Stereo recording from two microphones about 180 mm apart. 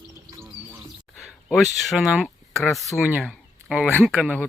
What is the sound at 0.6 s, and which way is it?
Music, 20° right (ahead or behind).